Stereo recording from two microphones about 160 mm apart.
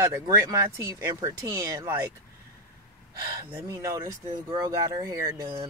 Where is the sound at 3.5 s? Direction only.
20° right (ahead or behind).